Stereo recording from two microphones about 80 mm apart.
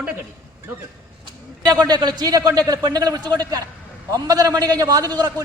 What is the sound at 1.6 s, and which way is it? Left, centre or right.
A man's voice, right.